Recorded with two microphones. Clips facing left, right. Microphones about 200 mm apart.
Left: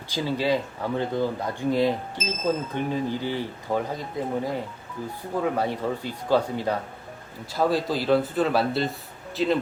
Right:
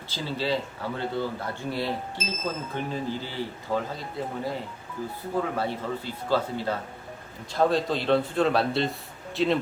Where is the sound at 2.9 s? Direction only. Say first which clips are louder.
Left 4 dB; 15° left (ahead or behind).